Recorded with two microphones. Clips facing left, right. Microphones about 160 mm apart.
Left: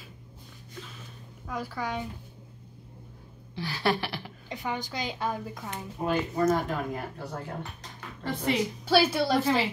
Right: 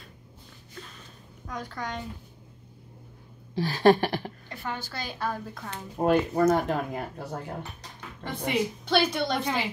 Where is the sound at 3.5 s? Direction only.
45° right (ahead or behind).